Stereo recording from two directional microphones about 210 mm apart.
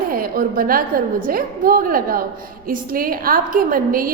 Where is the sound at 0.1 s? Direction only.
45° right (ahead or behind).